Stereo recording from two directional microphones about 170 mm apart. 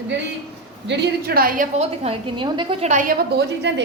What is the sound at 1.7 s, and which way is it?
A woman's voice, 35° right (ahead or behind).